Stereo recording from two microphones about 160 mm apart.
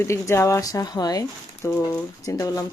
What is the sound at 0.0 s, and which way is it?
Speech, 15° left (ahead or behind).